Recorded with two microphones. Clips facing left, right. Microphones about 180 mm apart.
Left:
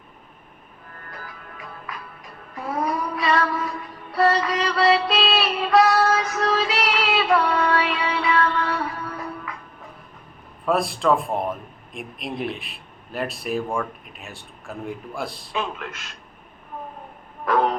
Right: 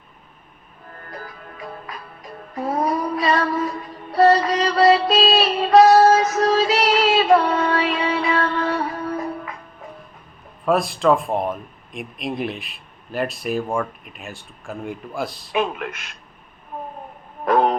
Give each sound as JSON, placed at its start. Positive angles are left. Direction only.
{"t": 1.1, "sound": "music", "side_deg": -40}
{"t": 10.7, "sound": "speech", "side_deg": 0}
{"t": 15.5, "sound": "speech", "side_deg": -15}
{"t": 17.4, "sound": "a sound", "side_deg": -25}